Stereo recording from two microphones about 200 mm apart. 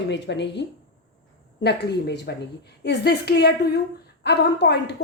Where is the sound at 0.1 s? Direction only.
60° left (ahead or behind).